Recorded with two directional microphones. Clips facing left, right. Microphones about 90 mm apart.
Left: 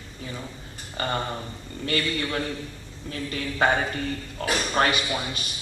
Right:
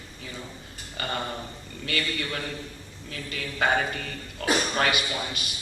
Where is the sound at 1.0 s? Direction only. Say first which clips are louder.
Left 4 dB; 35° left (ahead or behind).